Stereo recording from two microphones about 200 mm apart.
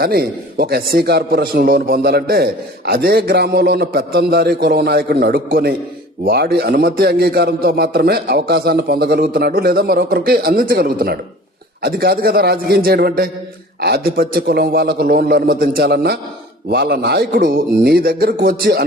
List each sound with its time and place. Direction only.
0.0 s a man's voice: 50° right (ahead or behind)